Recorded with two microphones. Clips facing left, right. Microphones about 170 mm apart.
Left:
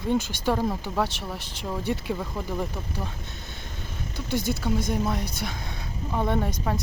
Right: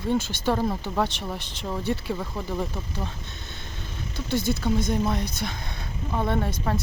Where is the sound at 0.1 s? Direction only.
15° left (ahead or behind).